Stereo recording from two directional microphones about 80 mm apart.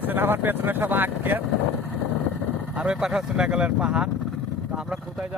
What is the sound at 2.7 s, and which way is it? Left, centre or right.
Speech, centre.